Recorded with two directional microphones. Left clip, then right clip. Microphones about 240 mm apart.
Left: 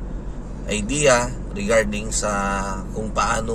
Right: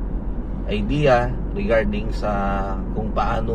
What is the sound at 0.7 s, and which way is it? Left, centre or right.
Speech, left.